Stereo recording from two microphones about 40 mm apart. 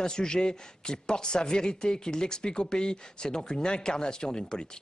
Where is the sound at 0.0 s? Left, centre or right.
Centre.